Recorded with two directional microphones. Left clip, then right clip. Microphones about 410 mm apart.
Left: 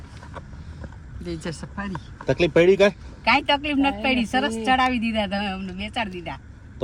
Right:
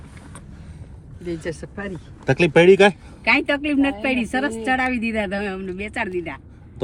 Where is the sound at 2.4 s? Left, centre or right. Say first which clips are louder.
Right 4 dB; right.